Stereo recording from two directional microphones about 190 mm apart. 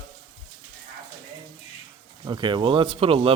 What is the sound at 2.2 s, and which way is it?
Speech, 25° right (ahead or behind).